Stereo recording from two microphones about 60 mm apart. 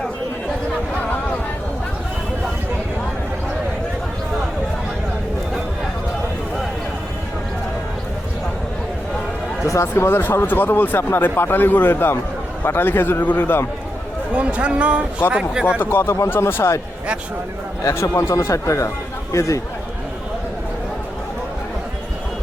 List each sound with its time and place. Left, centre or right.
9.6 s speech: left
14.3 s a man's voice: right
15.8 s speech: left
17.8 s speech: left